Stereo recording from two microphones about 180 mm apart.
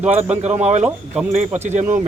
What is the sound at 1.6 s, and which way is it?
Speech, 40° right (ahead or behind).